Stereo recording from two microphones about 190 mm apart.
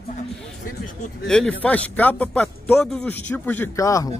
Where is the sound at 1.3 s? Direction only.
5° left (ahead or behind).